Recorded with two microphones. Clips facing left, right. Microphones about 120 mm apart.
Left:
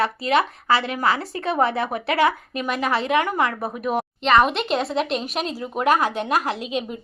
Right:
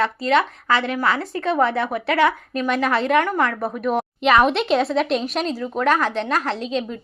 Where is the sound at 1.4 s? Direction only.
15° left (ahead or behind).